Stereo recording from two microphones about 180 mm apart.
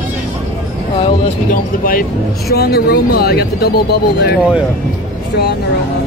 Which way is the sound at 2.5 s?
60° left (ahead or behind).